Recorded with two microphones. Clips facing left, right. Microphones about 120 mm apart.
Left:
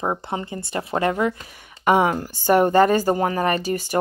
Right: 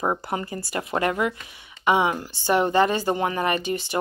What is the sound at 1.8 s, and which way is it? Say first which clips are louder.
Speech: left 3 dB; 45° left (ahead or behind).